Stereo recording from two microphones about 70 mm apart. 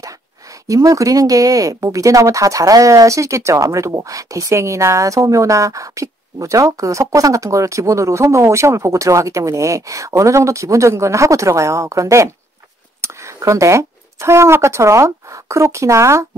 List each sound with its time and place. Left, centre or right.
0.7 s speech: right